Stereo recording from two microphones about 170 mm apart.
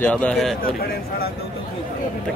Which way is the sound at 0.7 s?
60° left (ahead or behind).